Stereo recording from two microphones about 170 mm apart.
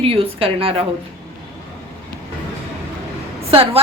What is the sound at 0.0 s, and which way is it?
Speech, 35° right (ahead or behind).